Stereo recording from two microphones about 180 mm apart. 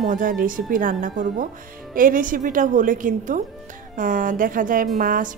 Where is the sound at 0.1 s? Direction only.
50° right (ahead or behind).